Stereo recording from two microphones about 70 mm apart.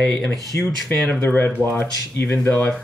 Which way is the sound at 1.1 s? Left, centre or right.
Left.